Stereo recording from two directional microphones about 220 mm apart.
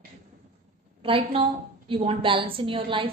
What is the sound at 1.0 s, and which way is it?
A woman's voice, 25° right (ahead or behind).